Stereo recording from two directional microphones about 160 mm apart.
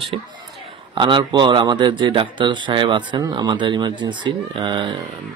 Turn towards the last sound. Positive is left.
turn(degrees=-30)  # may be behind; listen again after turning